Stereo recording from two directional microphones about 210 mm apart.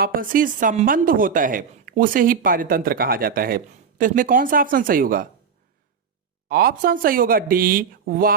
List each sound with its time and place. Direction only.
0.0 s speech: 40° right (ahead or behind)
6.5 s speech: 45° right (ahead or behind)